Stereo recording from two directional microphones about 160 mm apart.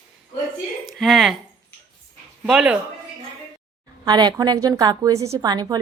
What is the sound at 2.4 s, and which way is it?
Speech, 5° right (ahead or behind).